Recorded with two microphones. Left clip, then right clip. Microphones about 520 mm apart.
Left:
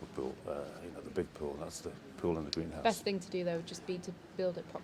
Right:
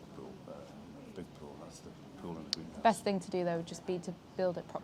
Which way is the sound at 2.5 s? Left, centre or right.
Centre.